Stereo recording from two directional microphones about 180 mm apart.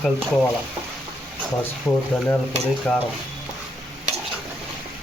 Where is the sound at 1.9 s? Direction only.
10° left (ahead or behind).